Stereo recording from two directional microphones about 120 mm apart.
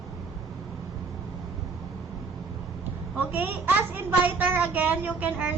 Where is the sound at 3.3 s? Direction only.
15° right (ahead or behind).